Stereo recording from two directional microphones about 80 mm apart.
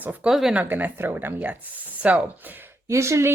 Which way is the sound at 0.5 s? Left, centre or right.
Right.